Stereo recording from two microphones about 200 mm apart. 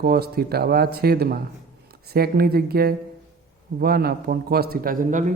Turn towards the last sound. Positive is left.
turn(degrees=-40)  # may be behind; listen again after turning